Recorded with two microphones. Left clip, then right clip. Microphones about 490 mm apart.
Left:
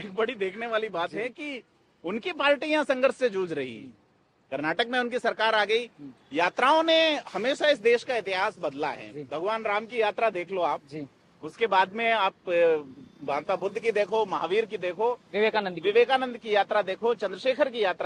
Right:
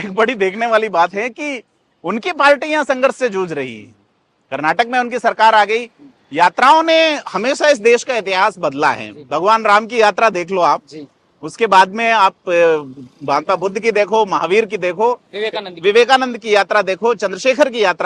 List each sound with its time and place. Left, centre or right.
0.0 s a man's voice: right
2.0 s a man's voice: right
6.3 s speech: right
15.3 s speech: left
15.8 s speech: right